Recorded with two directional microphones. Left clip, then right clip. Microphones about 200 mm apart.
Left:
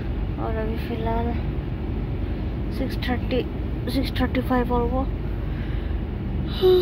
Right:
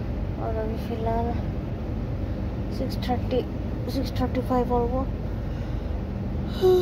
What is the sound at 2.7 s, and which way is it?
Speech, 10° right (ahead or behind).